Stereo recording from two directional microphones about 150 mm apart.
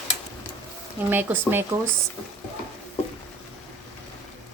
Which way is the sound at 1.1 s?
15° right (ahead or behind).